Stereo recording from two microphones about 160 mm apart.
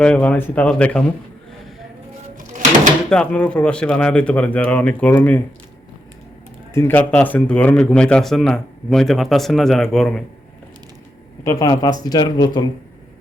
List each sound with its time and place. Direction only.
0.0 s speech: 5° left (ahead or behind)
2.5 s a sound: 50° right (ahead or behind)
3.1 s speech: 5° left (ahead or behind)
6.7 s speech: 10° left (ahead or behind)
11.4 s speech: 25° left (ahead or behind)